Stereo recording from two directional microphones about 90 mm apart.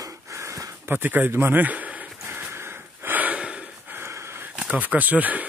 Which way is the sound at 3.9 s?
30° right (ahead or behind).